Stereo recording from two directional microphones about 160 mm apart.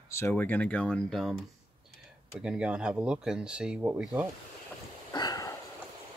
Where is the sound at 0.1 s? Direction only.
15° left (ahead or behind).